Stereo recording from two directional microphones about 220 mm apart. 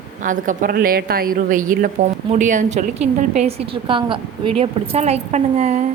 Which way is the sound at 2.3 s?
35° right (ahead or behind).